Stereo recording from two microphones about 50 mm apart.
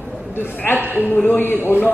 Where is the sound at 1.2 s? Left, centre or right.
Left.